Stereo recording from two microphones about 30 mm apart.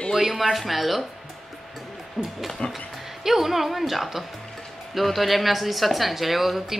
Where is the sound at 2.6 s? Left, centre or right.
Left.